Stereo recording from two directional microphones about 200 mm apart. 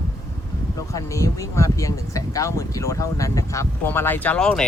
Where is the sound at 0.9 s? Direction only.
15° left (ahead or behind).